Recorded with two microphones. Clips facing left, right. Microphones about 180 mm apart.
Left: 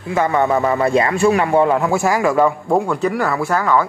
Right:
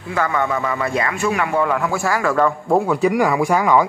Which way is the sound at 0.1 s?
25° left (ahead or behind).